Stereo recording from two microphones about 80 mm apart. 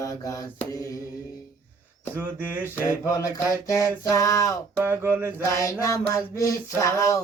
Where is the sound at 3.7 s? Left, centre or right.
Left.